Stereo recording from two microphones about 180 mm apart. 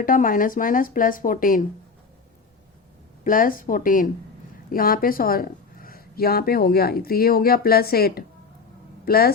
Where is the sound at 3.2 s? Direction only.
50° left (ahead or behind).